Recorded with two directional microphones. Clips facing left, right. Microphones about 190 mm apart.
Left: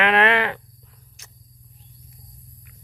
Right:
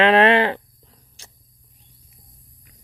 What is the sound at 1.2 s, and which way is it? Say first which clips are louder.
Wild animals: right 5 dB; 30° right (ahead or behind).